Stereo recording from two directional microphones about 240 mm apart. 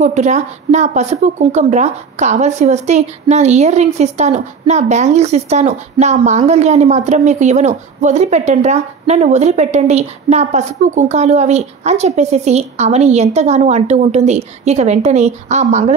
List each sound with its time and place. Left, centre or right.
0.0 s speech: right